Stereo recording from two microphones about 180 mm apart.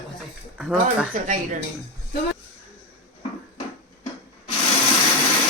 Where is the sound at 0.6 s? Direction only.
5° right (ahead or behind).